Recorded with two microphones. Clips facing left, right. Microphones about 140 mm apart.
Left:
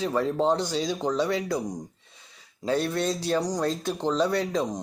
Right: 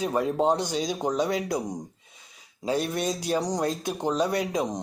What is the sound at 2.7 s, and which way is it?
Speech, 15° right (ahead or behind).